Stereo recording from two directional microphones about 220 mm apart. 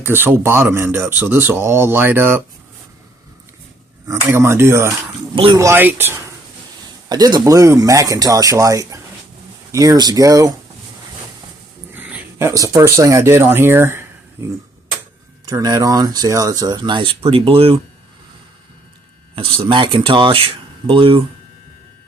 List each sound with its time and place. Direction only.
0.0 s speech: 10° right (ahead or behind)
4.1 s speech: 10° right (ahead or behind)
5.3 s speech: 25° right (ahead or behind)
5.5 s speech: 10° right (ahead or behind)
11.9 s speech: 10° right (ahead or behind)
15.4 s speech: 15° right (ahead or behind)
19.4 s speech: 25° right (ahead or behind)